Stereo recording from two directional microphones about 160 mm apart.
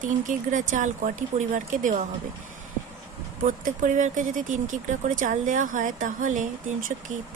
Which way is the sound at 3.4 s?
55° right (ahead or behind).